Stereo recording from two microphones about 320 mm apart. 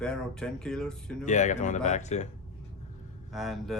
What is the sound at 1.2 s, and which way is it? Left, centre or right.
Speech, left.